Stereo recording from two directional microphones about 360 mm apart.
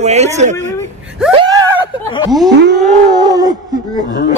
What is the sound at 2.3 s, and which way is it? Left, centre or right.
Speech, centre.